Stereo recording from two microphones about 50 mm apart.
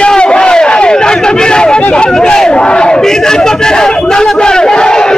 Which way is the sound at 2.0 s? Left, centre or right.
Centre.